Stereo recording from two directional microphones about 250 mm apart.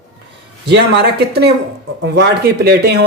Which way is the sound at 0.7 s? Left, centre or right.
Right.